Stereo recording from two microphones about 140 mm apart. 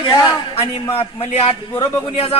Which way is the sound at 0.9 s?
45° left (ahead or behind).